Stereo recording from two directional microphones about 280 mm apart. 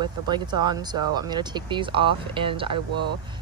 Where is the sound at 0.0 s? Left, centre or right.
Centre.